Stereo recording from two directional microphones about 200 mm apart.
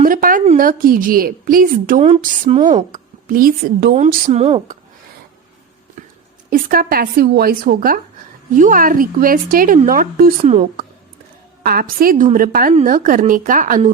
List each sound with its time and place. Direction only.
0.0 s a woman's voice: 45° right (ahead or behind); by 2.8 s 30° right (ahead or behind)
2.9 s a woman's voice: 45° right (ahead or behind)
3.9 s speech: 35° right (ahead or behind)
6.0 s a sound: 40° right (ahead or behind)
6.5 s a woman's voice: 45° right (ahead or behind)
10.4 s speech: 30° right (ahead or behind)
11.6 s a woman's voice: 50° right (ahead or behind)